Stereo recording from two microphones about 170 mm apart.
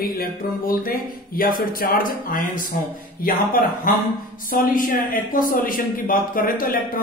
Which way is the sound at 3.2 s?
55° left (ahead or behind).